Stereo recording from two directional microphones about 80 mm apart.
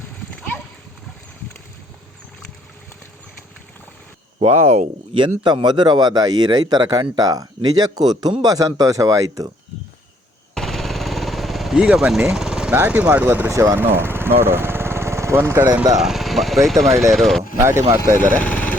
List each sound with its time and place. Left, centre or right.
5.1 s speech: right
10.5 s a sound: centre
12.3 s vehicle: centre
12.7 s speech: right
16.0 s speech: centre
17.6 s speech: right
18.2 s speech: left